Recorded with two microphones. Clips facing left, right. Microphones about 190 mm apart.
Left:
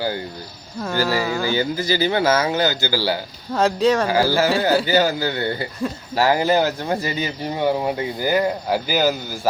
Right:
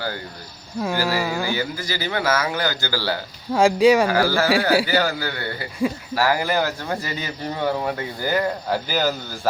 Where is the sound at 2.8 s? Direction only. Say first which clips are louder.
Left 3 dB; 10° left (ahead or behind).